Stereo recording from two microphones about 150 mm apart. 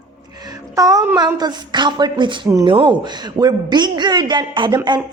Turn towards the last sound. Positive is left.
turn(degrees=-30)  # may be behind; listen again after turning